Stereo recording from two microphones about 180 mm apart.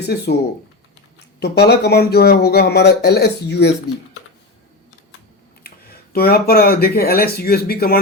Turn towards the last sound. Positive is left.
turn(degrees=55)  # may be behind; listen again after turning